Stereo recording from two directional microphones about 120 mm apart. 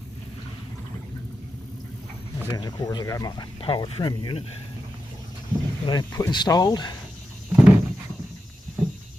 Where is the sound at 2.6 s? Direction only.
35° left (ahead or behind).